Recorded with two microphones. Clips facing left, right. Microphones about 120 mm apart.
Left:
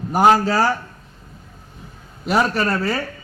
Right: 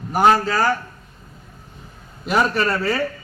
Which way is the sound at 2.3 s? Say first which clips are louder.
Even; 5° left (ahead or behind).